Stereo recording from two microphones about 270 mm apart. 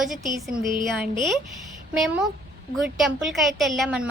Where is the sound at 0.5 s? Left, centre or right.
Right.